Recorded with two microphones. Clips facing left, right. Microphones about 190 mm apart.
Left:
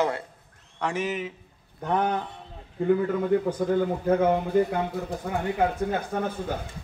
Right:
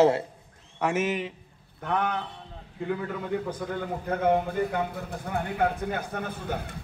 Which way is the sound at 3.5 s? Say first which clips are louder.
Left 8 dB; 45° left (ahead or behind).